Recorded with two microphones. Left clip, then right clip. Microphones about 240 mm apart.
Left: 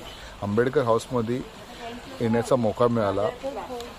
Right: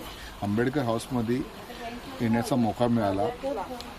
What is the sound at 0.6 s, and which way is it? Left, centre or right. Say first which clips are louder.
Speech: left 6 dB; centre.